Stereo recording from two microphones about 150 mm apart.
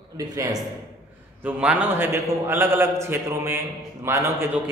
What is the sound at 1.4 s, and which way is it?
A man's voice, 10° right (ahead or behind).